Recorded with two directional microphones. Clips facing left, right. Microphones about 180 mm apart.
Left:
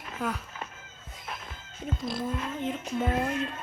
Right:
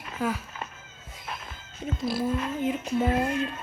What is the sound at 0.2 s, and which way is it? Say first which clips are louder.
Female singing: right 4 dB; 5° right (ahead or behind).